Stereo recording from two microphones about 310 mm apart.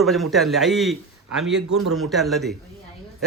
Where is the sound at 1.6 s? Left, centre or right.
Right.